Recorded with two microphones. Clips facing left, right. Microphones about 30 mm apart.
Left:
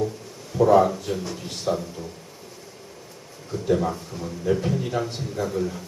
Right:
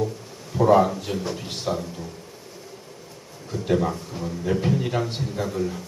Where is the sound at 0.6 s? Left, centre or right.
Centre.